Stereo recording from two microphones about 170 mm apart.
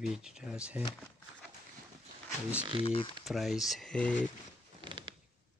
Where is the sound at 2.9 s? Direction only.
30° left (ahead or behind).